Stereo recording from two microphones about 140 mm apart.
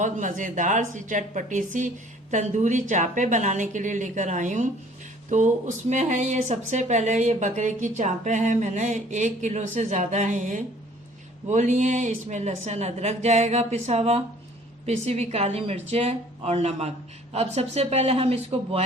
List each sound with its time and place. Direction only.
0.0 s speech: 65° right (ahead or behind); by 18.9 s 50° right (ahead or behind)